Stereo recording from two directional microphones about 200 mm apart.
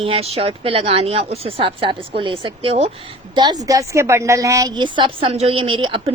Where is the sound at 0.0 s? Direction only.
30° right (ahead or behind).